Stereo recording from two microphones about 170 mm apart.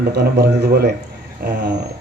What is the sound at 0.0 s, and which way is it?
Speech, 70° right (ahead or behind).